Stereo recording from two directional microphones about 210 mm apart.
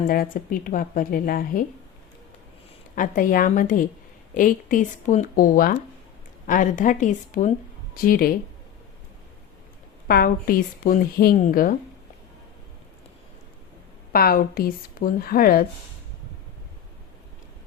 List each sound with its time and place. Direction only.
0.1 s a woman's voice: 40° left (ahead or behind)
2.9 s a woman's voice: 40° left (ahead or behind)
10.1 s a woman's voice: 45° left (ahead or behind)
14.1 s a woman's voice: 45° left (ahead or behind)